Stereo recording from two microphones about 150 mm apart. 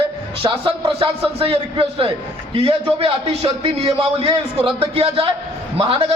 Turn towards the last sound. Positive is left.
turn(degrees=-40)  # may be behind; listen again after turning